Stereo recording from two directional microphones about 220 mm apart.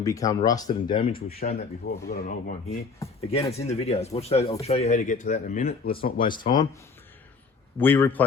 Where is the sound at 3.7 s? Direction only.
30° left (ahead or behind).